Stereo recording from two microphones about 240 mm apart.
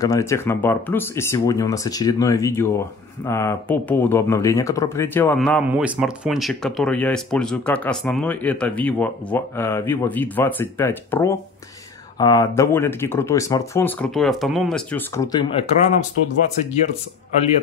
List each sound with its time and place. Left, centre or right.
0.0 s speech: centre
15.5 s speech: left